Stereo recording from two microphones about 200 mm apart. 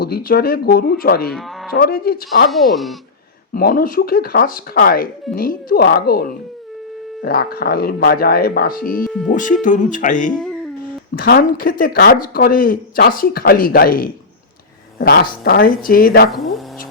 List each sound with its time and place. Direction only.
0.0 s speech: 50° left (ahead or behind)
1.3 s speech: centre (ahead or behind)
1.7 s speech: 50° left (ahead or behind)
3.5 s speech: 45° left (ahead or behind)